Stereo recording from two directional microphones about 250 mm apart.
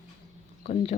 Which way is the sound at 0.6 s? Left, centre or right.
Left.